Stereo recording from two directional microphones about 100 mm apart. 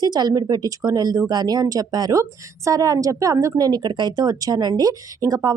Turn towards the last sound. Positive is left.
turn(degrees=-35)  # may be behind; listen again after turning